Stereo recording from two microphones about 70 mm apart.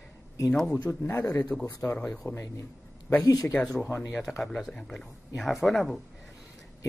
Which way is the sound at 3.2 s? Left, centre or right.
Left.